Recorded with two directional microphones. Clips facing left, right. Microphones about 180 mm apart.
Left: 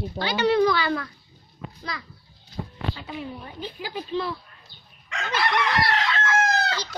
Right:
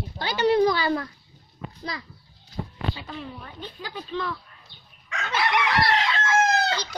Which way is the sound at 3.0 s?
10° left (ahead or behind).